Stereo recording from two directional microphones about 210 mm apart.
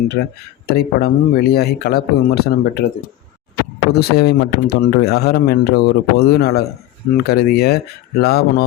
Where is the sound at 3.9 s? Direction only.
50° left (ahead or behind).